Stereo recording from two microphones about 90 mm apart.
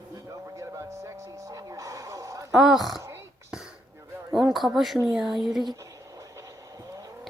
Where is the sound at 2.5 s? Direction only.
Centre (ahead or behind).